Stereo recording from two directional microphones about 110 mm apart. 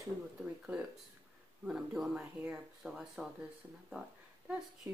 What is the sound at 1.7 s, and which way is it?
Speech, 5° right (ahead or behind).